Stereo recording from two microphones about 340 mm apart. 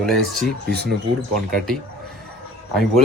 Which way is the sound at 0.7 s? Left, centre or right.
Right.